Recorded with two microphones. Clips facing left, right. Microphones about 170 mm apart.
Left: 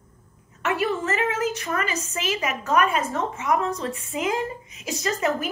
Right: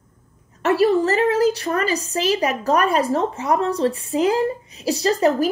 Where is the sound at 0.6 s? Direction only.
35° right (ahead or behind).